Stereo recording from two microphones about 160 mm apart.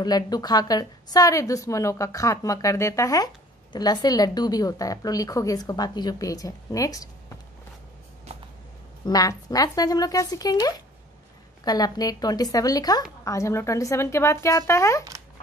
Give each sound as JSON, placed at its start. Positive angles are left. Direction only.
{"t": 0.0, "sound": "a woman's voice", "side_deg": 25}
{"t": 9.0, "sound": "a woman's voice", "side_deg": 25}